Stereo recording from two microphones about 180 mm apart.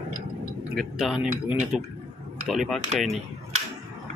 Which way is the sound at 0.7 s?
Centre (ahead or behind).